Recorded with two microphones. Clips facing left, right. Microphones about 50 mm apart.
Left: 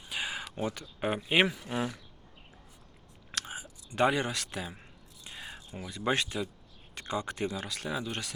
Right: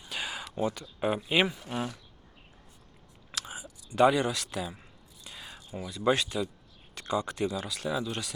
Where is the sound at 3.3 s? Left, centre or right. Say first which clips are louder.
Left 1 dB; left.